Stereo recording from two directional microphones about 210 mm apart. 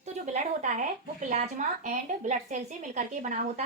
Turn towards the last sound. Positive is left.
turn(degrees=-35)  # may be behind; listen again after turning